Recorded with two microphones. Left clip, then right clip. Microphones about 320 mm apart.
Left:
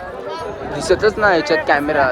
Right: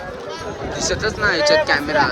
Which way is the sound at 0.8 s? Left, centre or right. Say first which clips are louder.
Left 6 dB; centre.